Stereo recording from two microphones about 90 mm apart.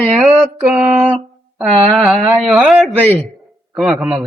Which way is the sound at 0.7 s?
15° right (ahead or behind).